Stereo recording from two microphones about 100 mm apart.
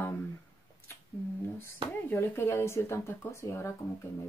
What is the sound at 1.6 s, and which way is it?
Speech, 25° left (ahead or behind).